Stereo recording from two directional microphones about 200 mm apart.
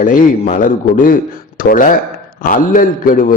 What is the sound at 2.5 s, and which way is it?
Speech, 40° left (ahead or behind).